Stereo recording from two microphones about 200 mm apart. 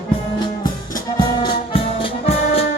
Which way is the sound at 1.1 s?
25° left (ahead or behind).